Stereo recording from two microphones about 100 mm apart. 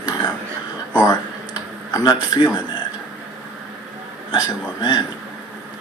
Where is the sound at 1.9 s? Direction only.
45° left (ahead or behind).